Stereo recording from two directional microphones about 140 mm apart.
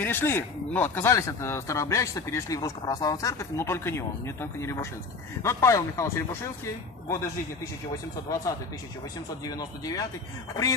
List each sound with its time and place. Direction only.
0.0 s speech: 15° left (ahead or behind)
9.5 s speech: 25° left (ahead or behind)